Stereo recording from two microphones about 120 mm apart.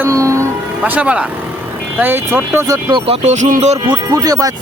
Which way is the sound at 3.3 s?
75° right (ahead or behind).